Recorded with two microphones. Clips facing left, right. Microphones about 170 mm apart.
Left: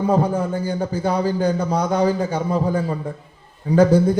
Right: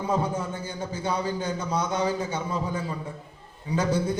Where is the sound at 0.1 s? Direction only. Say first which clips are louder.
Left 6 dB; 35° left (ahead or behind).